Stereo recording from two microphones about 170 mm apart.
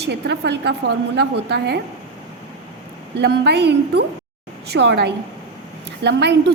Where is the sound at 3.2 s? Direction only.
75° right (ahead or behind).